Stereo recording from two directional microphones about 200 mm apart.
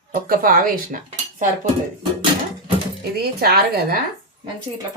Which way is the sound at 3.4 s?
50° right (ahead or behind).